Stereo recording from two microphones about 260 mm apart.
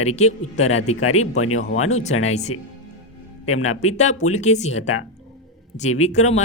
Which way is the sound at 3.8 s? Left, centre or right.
Left.